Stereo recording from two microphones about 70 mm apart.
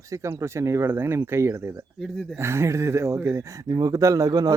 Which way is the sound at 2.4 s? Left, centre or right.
Right.